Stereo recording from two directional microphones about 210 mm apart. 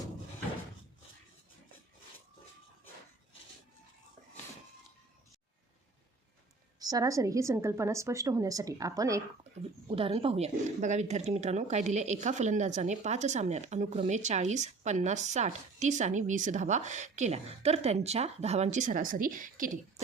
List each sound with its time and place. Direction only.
6.7 s a woman's voice: 15° right (ahead or behind)
9.9 s speech: 25° right (ahead or behind)